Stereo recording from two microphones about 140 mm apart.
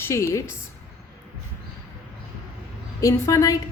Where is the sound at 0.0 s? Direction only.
20° left (ahead or behind).